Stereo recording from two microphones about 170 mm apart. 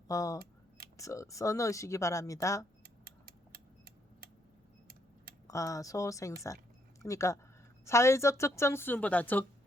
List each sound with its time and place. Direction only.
0.1 s speech: 20° left (ahead or behind)
5.5 s a woman's voice: 20° left (ahead or behind)